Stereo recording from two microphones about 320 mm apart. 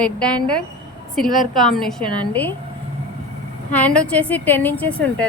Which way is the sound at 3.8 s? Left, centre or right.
Centre.